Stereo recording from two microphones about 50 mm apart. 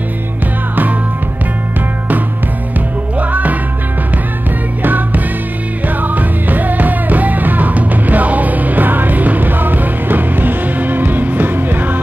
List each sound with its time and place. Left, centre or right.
3.2 s music: right
4.8 s music: right